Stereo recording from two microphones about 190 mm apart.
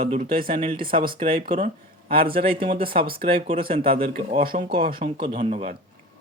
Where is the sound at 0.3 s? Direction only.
50° right (ahead or behind).